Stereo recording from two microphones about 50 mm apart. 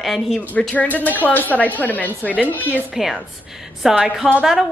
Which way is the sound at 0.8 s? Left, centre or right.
Left.